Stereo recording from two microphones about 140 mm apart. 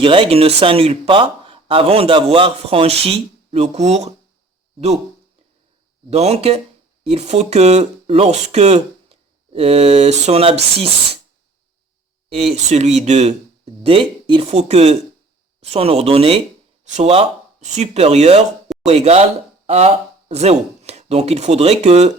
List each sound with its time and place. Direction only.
0.0 s speech: 40° right (ahead or behind)
6.1 s speech: 50° right (ahead or behind)
12.3 s speech: 45° right (ahead or behind)
13.8 s speech: 40° right (ahead or behind)
14.4 s speech: 50° right (ahead or behind)